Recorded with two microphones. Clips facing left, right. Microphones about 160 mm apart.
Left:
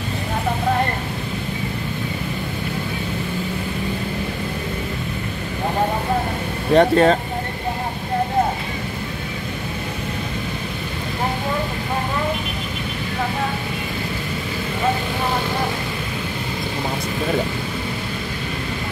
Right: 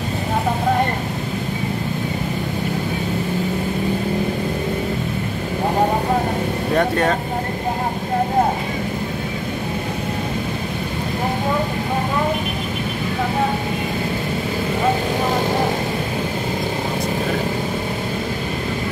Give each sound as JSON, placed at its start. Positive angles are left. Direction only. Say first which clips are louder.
{"t": 6.7, "sound": "speech", "louder": "left 6 dB", "side_deg": 25}